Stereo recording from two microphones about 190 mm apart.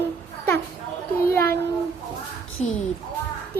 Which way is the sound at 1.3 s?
15° left (ahead or behind).